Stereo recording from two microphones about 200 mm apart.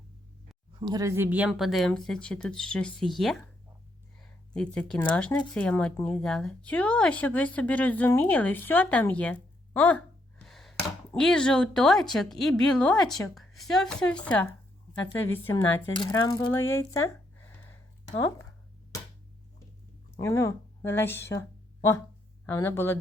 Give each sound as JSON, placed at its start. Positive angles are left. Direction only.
{"t": 0.8, "sound": "speech", "side_deg": -20}
{"t": 10.4, "sound": "a sound", "side_deg": 0}
{"t": 10.8, "sound": "speech", "side_deg": 5}
{"t": 15.9, "sound": "speech", "side_deg": 25}
{"t": 20.1, "sound": "a woman's voice", "side_deg": 15}
{"t": 22.4, "sound": "speech", "side_deg": 10}